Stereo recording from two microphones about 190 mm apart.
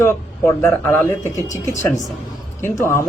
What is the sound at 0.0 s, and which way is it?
Speech, 15° left (ahead or behind).